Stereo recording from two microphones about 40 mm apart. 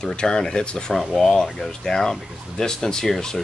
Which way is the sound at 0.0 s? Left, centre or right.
Left.